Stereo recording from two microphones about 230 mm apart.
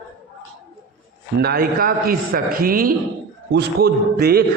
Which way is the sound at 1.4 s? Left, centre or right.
Right.